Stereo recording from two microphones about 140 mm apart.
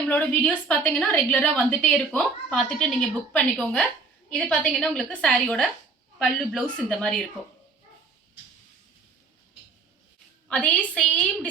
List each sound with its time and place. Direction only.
0.1 s a woman's voice: 10° left (ahead or behind)
10.5 s a woman's voice: 10° left (ahead or behind)